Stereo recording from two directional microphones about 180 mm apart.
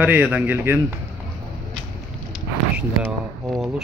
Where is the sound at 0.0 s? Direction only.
10° right (ahead or behind).